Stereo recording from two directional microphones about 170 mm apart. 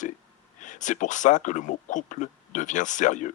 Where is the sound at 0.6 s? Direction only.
45° left (ahead or behind).